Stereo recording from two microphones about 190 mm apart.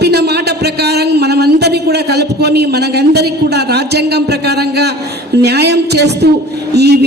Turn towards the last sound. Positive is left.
turn(degrees=-60)  # may be behind; listen again after turning